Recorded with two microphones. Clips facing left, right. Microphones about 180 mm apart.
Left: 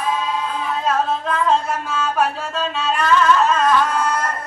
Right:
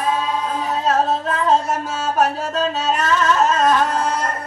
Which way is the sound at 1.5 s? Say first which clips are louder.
Right 3 dB; 40° right (ahead or behind).